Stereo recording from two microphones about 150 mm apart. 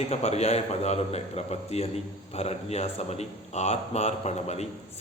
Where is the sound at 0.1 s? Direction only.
45° left (ahead or behind).